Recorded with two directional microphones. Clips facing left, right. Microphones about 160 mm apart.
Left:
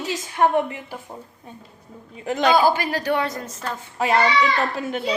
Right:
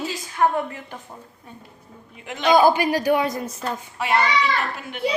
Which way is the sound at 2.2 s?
40° left (ahead or behind).